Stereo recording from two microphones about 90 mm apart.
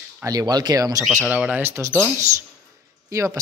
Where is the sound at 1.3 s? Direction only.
15° right (ahead or behind).